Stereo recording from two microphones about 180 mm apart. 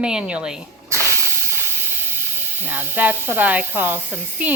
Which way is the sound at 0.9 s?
15° right (ahead or behind).